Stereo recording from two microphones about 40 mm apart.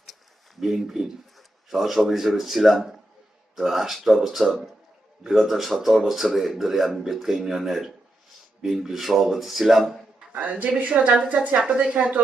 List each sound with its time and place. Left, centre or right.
0.6 s a man's voice: centre
10.3 s a woman's voice: right